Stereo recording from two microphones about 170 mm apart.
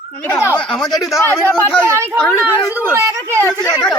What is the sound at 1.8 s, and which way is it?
A woman's voice, 15° right (ahead or behind).